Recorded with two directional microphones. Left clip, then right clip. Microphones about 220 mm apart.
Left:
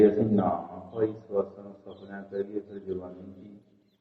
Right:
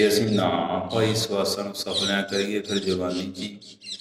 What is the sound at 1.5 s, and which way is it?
Mantra, 30° right (ahead or behind).